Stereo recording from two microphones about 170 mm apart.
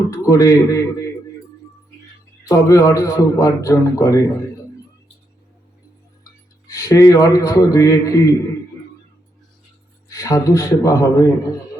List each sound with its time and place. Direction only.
0.1 s a man's voice: 20° left (ahead or behind)
2.5 s a man's voice: 20° left (ahead or behind)
6.7 s a man's voice: 20° left (ahead or behind)
10.1 s a man's voice: 20° left (ahead or behind)